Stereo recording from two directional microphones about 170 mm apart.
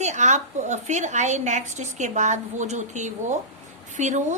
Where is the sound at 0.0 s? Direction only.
45° right (ahead or behind).